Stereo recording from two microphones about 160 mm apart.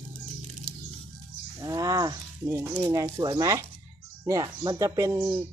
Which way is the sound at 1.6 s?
20° right (ahead or behind).